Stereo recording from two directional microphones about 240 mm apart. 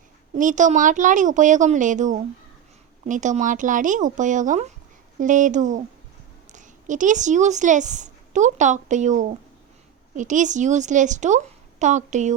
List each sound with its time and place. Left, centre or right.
0.3 s a woman's voice: right